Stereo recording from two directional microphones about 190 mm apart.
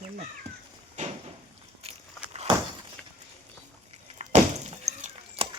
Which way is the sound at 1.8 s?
30° right (ahead or behind).